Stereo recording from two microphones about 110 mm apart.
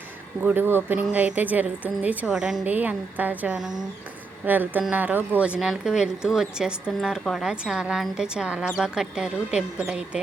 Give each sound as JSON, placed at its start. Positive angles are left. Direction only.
{"t": 0.4, "sound": "speech", "side_deg": -20}